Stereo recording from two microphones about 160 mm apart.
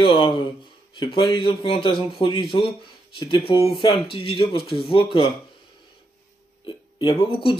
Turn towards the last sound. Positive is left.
turn(degrees=35)  # may be behind; listen again after turning